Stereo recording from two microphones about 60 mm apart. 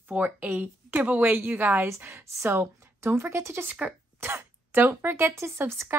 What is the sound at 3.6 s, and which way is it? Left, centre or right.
Speech, right.